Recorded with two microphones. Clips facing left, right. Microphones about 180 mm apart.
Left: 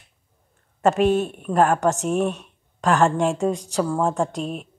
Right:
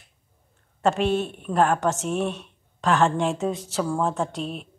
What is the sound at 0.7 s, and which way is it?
Speech, 5° left (ahead or behind).